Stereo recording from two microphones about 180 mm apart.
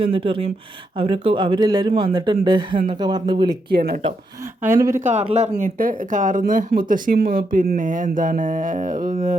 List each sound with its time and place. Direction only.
0.0 s speech: 30° right (ahead or behind)
4.6 s speech: 15° right (ahead or behind)
4.9 s speech: 40° right (ahead or behind)